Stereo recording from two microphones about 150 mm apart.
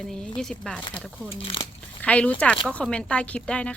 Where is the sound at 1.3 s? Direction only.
35° left (ahead or behind).